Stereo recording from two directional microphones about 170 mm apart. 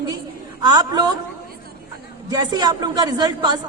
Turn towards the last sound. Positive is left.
turn(degrees=-25)  # may be behind; listen again after turning